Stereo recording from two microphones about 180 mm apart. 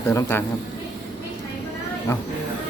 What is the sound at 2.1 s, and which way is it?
Speech, 15° left (ahead or behind).